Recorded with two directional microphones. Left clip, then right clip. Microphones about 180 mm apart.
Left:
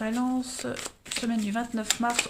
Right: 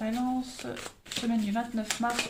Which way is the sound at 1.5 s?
50° left (ahead or behind).